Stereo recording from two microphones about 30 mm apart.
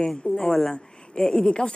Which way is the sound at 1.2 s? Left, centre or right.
Left.